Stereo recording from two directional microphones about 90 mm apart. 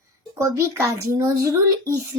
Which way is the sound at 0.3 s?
30° right (ahead or behind).